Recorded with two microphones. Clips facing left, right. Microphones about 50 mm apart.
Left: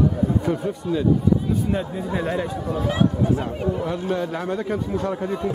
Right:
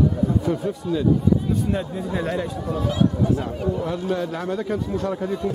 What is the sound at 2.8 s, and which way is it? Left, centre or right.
Speech, left.